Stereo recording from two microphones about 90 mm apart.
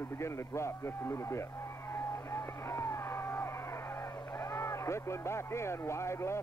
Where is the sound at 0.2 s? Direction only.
30° left (ahead or behind).